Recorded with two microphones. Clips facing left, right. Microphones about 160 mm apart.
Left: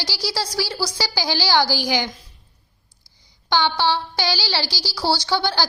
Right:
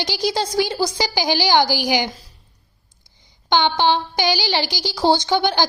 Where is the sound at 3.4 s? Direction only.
20° right (ahead or behind).